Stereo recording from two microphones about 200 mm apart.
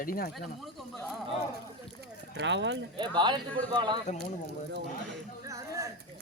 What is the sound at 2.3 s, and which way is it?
Speech, 60° right (ahead or behind).